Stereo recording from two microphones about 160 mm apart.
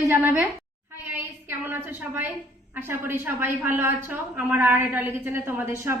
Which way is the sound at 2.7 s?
15° right (ahead or behind).